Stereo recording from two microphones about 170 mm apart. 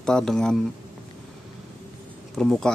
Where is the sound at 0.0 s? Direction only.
5° left (ahead or behind).